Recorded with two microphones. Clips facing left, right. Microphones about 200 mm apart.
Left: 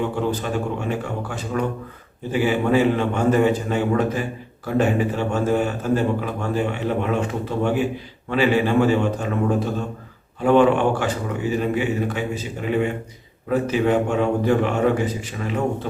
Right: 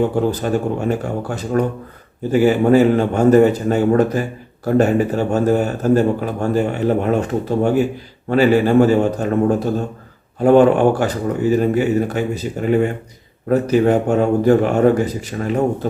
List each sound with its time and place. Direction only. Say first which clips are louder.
0.0 s a man's voice: right 6 dB; 40° right (ahead or behind)